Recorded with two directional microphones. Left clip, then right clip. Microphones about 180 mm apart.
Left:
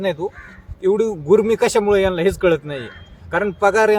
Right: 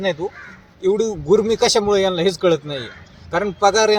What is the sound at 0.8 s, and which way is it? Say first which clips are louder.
Speech: left 1 dB; 25° left (ahead or behind).